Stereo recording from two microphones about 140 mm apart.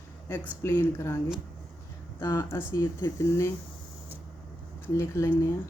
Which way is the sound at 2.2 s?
20° left (ahead or behind).